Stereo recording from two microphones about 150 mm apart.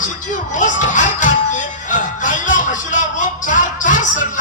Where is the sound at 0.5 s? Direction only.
55° left (ahead or behind).